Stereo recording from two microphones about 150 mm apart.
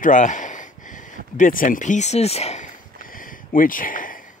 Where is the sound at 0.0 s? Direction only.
55° left (ahead or behind).